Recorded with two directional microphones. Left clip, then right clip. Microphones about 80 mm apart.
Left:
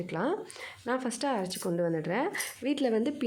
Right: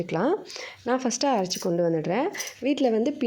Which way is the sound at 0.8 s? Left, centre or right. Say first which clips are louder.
Right 7 dB; right.